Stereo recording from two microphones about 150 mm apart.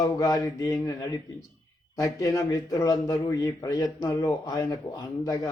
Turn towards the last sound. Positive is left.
turn(degrees=25)  # may be behind; listen again after turning